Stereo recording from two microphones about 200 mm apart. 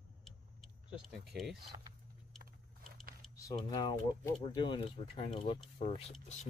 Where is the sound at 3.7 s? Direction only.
20° left (ahead or behind); by 6.5 s 35° left (ahead or behind).